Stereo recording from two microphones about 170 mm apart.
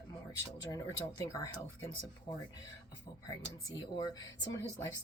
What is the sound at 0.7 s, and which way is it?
Speech, 20° left (ahead or behind).